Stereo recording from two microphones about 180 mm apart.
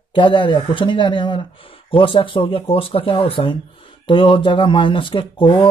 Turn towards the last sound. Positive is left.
turn(degrees=30)  # may be behind; listen again after turning